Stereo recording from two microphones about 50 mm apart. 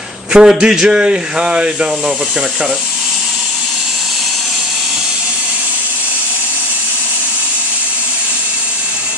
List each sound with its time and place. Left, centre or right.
0.3 s a man's voice: centre